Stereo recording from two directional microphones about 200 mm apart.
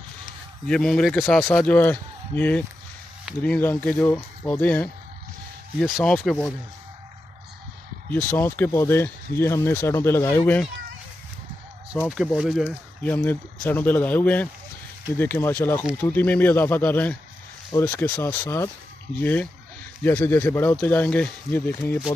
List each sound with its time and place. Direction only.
0.7 s a man's voice: 5° left (ahead or behind)
8.1 s speech: 10° left (ahead or behind)
12.1 s a man's voice: centre (ahead or behind)
13.1 s speech: 10° left (ahead or behind)
20.0 s speech: 10° left (ahead or behind)